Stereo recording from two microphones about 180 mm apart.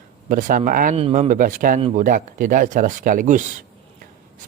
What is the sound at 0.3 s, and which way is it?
Speech, 50° right (ahead or behind).